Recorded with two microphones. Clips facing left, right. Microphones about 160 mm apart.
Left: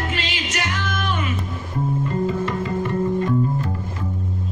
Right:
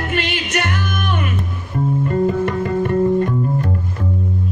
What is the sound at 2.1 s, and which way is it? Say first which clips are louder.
Music: right 7 dB; 55° right (ahead or behind).